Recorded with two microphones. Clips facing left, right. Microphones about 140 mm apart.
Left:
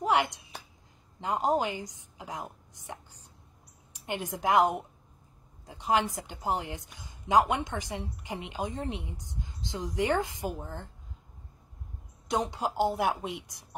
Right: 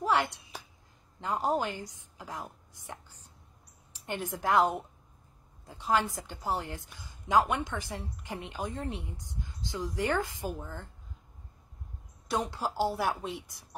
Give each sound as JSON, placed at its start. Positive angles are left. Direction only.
{"t": 0.0, "sound": "a sound", "side_deg": 15}
{"t": 1.2, "sound": "a woman's voice", "side_deg": 20}
{"t": 12.3, "sound": "a woman's voice", "side_deg": 20}